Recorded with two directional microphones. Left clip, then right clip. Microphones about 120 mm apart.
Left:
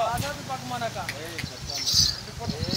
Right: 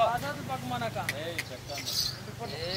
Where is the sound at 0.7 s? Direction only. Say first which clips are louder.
Left 2 dB; 5° left (ahead or behind).